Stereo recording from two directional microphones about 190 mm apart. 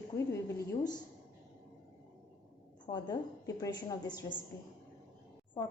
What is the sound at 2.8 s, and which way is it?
Speech, 20° left (ahead or behind).